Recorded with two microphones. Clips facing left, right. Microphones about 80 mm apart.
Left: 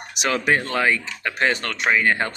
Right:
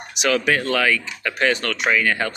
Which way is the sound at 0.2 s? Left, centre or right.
Left.